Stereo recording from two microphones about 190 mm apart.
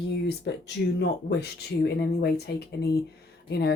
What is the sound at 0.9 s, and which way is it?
Speech, 60° left (ahead or behind).